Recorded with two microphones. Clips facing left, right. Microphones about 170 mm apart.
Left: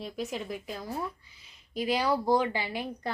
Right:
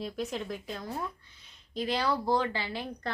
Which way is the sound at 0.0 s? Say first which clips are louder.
Right 1 dB; centre (ahead or behind).